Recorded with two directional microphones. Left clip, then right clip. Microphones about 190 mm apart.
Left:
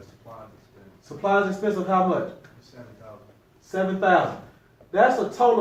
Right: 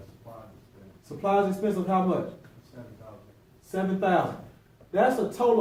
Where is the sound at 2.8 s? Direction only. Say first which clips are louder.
Left 2 dB; 25° left (ahead or behind).